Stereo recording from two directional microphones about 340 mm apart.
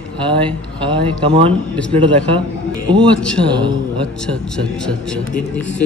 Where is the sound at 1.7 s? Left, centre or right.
Centre.